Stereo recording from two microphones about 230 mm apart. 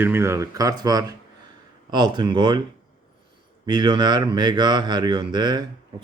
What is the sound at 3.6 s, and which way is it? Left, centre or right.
Speech, centre.